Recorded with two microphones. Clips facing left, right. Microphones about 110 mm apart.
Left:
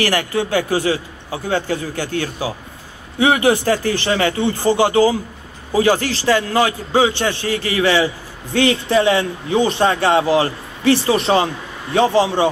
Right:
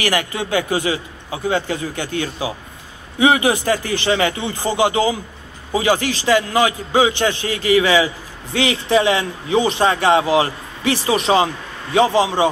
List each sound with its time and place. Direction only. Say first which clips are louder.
0.0 s speech: left 2 dB; 15° right (ahead or behind)